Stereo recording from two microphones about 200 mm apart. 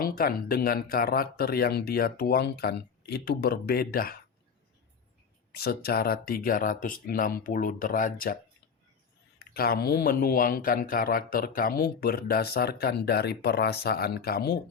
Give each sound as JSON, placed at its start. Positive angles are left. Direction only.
{"t": 0.0, "sound": "speech", "side_deg": 45}
{"t": 5.5, "sound": "speech", "side_deg": 50}
{"t": 9.4, "sound": "speech", "side_deg": 50}